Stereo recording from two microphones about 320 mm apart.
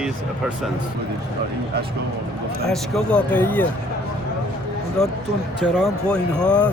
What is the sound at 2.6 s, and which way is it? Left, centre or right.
Speech, centre.